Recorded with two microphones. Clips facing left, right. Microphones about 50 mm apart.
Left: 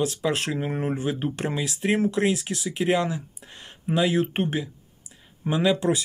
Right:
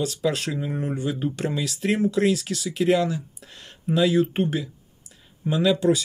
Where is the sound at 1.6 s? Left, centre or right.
Left.